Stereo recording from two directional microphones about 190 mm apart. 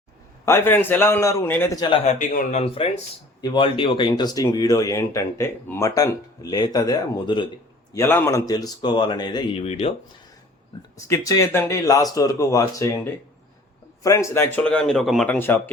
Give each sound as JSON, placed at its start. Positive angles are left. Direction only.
{"t": 0.4, "sound": "speech", "side_deg": 15}
{"t": 2.0, "sound": "speech", "side_deg": 40}
{"t": 10.9, "sound": "speech", "side_deg": 15}
{"t": 14.0, "sound": "speech", "side_deg": 15}